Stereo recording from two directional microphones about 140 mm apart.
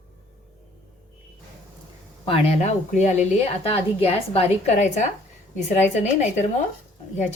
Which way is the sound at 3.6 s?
45° left (ahead or behind).